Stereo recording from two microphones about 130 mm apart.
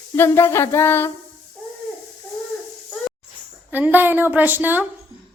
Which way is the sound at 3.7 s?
15° right (ahead or behind).